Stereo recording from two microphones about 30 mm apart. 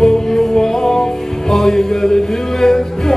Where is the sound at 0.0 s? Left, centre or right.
Centre.